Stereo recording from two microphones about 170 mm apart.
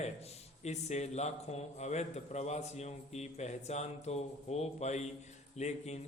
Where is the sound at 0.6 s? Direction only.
40° left (ahead or behind).